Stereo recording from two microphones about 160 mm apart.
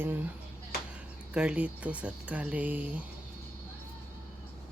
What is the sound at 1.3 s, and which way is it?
Speech, 5° right (ahead or behind).